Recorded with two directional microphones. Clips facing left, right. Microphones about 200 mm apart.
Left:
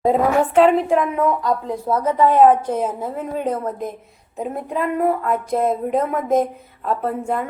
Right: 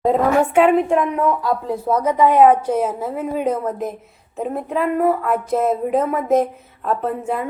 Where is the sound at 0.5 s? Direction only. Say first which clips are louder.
Left 2 dB; 5° right (ahead or behind).